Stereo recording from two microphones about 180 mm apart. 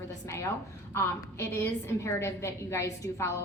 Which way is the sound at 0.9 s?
15° left (ahead or behind).